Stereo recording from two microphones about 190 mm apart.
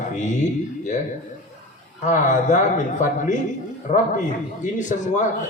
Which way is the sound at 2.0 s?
40° left (ahead or behind).